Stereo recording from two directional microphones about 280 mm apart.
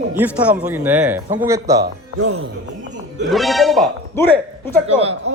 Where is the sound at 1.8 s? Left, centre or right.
Right.